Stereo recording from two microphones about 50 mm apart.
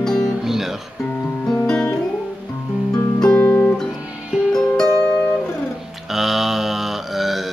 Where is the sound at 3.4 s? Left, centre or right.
Left.